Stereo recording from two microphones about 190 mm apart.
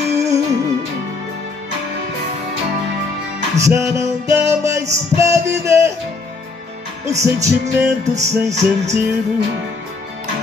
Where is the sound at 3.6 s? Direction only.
15° right (ahead or behind).